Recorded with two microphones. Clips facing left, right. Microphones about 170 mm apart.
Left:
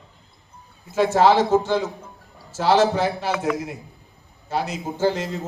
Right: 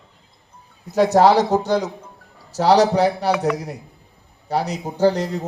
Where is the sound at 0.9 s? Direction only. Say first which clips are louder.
Right 3 dB; 40° right (ahead or behind).